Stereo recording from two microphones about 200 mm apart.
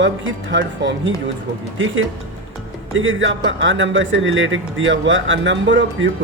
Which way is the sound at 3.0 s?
70° right (ahead or behind).